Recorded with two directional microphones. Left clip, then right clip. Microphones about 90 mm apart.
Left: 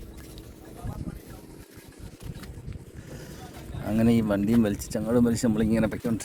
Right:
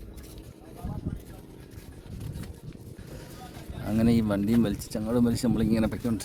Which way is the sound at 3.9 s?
5° right (ahead or behind).